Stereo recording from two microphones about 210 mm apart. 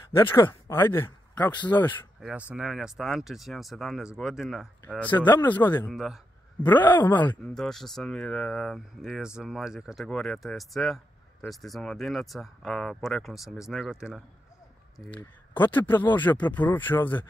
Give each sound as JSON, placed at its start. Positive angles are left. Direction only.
{"t": 0.1, "sound": "speech", "side_deg": 10}
{"t": 1.7, "sound": "speech", "side_deg": 10}
{"t": 2.1, "sound": "speech", "side_deg": -5}
{"t": 5.1, "sound": "speech", "side_deg": 20}
{"t": 5.4, "sound": "speech", "side_deg": 10}
{"t": 5.9, "sound": "speech", "side_deg": 0}
{"t": 6.6, "sound": "speech", "side_deg": 10}
{"t": 15.1, "sound": "speech", "side_deg": 10}